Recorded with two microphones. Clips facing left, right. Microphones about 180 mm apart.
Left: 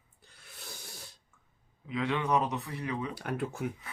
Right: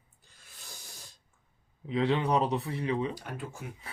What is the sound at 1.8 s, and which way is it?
Speech, 30° right (ahead or behind).